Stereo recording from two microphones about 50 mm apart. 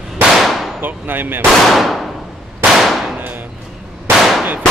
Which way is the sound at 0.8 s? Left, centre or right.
Right.